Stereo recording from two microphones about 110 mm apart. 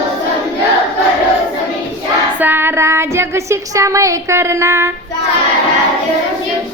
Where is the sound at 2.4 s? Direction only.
20° right (ahead or behind).